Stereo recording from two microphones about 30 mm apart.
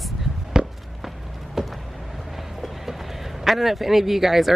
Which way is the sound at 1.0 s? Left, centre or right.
Centre.